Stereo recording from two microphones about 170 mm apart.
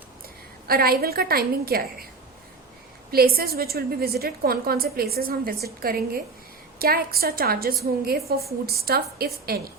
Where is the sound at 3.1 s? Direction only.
65° right (ahead or behind).